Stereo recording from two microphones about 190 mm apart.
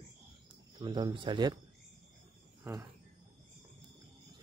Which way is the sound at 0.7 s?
20° right (ahead or behind).